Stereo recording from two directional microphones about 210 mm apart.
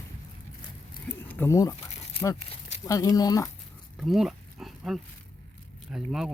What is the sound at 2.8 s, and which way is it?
Speech, 15° left (ahead or behind).